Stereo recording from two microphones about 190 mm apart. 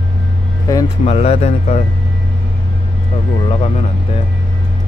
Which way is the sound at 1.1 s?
35° left (ahead or behind).